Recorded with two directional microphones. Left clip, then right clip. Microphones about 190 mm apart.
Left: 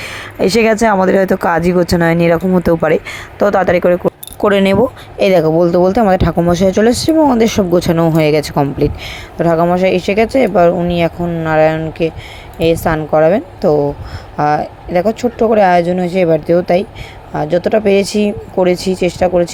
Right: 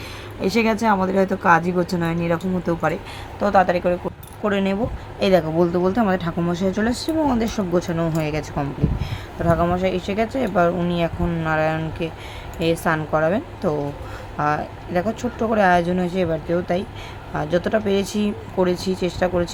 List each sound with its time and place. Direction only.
0.0 s speech: 35° left (ahead or behind)
4.4 s speech: 50° left (ahead or behind)
5.2 s speech: 35° left (ahead or behind)
17.3 s speech: 25° left (ahead or behind)